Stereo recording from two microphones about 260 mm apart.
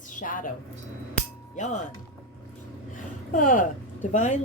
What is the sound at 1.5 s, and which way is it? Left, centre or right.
Speech, left.